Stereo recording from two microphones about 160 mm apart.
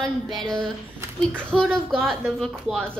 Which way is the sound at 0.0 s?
Centre (ahead or behind).